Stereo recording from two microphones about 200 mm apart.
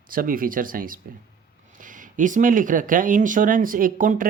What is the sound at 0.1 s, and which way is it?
Speech, 45° right (ahead or behind).